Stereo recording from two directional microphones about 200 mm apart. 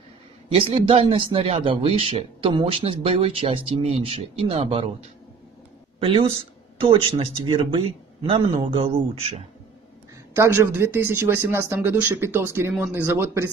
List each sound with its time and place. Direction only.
0.5 s speech: 30° right (ahead or behind)
5.9 s speech: 25° right (ahead or behind)
10.3 s speech: 15° right (ahead or behind)